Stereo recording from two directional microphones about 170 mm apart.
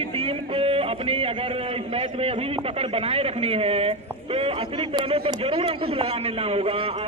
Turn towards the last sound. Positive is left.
turn(degrees=-35)  # may be behind; listen again after turning